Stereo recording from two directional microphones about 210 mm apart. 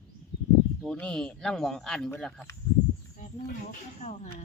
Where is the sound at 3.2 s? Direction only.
40° left (ahead or behind).